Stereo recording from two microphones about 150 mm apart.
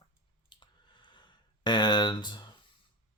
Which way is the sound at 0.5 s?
30° left (ahead or behind).